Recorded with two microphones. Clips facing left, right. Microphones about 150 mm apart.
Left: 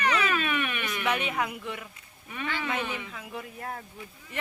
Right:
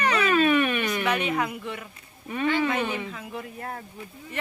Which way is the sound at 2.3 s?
40° right (ahead or behind).